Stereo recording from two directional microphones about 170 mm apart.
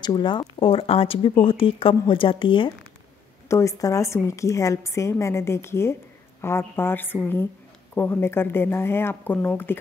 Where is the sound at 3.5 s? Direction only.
20° left (ahead or behind).